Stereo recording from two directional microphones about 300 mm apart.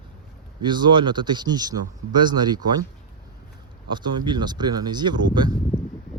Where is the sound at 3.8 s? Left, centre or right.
Centre.